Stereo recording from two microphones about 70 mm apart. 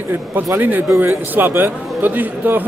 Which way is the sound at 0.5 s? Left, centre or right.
Right.